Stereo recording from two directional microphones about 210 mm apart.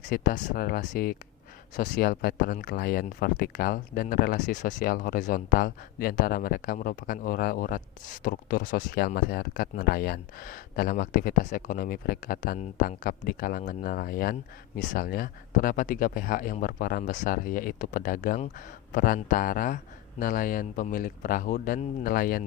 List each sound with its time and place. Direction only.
0.1 s speech: 40° left (ahead or behind)